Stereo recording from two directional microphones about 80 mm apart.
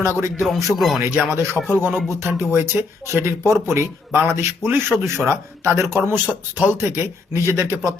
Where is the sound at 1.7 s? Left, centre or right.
Right.